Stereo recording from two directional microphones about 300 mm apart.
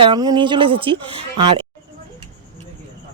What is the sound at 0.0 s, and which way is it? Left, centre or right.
Speech, centre.